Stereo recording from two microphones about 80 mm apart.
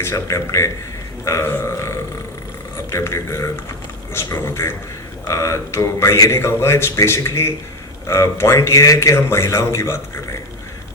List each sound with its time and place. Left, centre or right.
0.0 s a man's voice: left
2.9 s a man's voice: left